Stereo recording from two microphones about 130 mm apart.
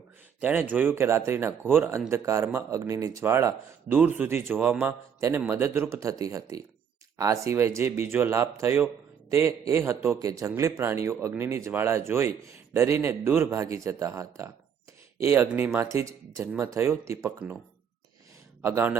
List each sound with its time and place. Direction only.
0.4 s a man's voice: 15° right (ahead or behind)
18.6 s a man's voice: 20° right (ahead or behind)